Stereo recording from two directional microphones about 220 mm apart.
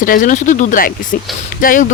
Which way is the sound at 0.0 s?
40° left (ahead or behind).